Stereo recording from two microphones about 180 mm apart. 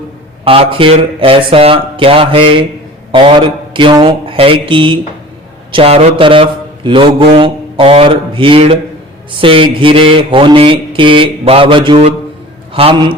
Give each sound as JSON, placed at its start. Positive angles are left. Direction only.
{"t": 0.4, "sound": "speech", "side_deg": -30}
{"t": 3.1, "sound": "mantra", "side_deg": -30}
{"t": 12.7, "sound": "a man's voice", "side_deg": -30}